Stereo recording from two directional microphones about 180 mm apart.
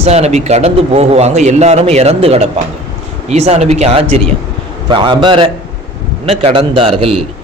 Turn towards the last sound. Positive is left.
turn(degrees=-30)  # may be behind; listen again after turning